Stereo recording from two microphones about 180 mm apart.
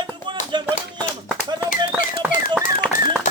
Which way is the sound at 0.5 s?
25° right (ahead or behind).